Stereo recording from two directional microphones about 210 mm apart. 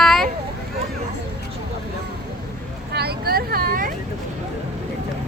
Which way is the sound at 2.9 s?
50° right (ahead or behind).